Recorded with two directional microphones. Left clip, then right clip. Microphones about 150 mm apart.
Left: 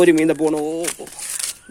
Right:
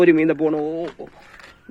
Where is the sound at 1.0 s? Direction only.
20° left (ahead or behind).